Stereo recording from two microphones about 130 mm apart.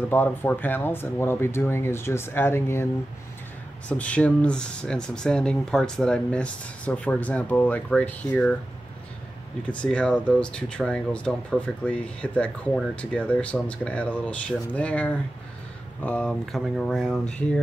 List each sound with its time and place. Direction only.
0.1 s speech: 15° left (ahead or behind)
3.9 s speech: 10° left (ahead or behind)
9.7 s speech: 10° left (ahead or behind)